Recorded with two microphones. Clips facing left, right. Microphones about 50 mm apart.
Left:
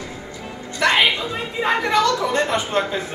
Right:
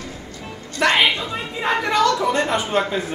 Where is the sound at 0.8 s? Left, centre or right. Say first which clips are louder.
Even; centre.